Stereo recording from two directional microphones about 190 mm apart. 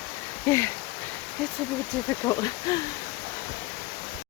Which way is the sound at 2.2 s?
20° left (ahead or behind).